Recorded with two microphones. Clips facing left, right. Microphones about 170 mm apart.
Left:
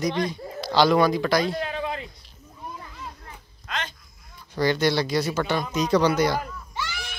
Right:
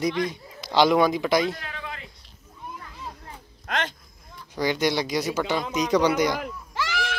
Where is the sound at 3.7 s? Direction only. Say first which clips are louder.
Right 4 dB; 60° right (ahead or behind).